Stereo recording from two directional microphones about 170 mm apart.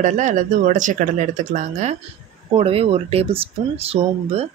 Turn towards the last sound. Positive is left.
turn(degrees=-35)  # may be behind; listen again after turning